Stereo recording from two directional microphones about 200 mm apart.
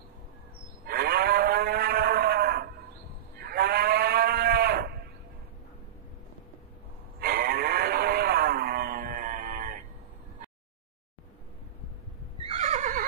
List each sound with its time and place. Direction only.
0.8 s livestock: 50° right (ahead or behind)
7.2 s a sound: 50° right (ahead or behind)
12.4 s neigh: 35° right (ahead or behind)